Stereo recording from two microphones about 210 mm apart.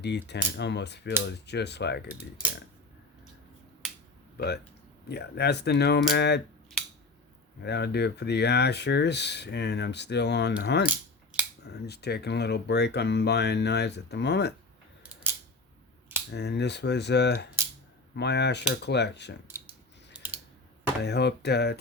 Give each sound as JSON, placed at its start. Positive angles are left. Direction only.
{"t": 0.0, "sound": "speech", "side_deg": 55}
{"t": 4.4, "sound": "speech", "side_deg": 50}
{"t": 7.6, "sound": "speech", "side_deg": 50}
{"t": 16.3, "sound": "speech", "side_deg": 55}
{"t": 20.1, "sound": "typing", "side_deg": -5}
{"t": 21.0, "sound": "speech", "side_deg": 50}